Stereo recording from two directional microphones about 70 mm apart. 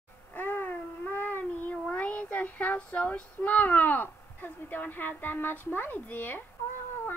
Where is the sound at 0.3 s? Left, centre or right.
Left.